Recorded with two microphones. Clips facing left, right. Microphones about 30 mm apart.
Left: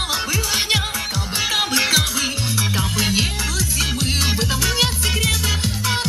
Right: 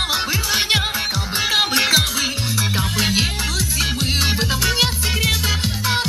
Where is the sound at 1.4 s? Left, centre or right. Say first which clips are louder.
Right 2 dB; centre.